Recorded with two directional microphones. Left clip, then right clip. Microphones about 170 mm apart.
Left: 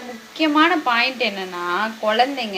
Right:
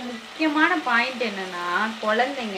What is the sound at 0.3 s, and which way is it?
Speech, 20° left (ahead or behind).